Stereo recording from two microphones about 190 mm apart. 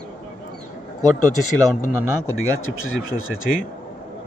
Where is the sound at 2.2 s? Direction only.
90° left.